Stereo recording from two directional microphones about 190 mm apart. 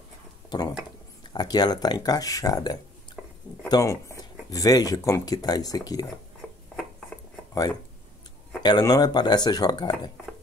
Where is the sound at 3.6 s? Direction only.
20° left (ahead or behind).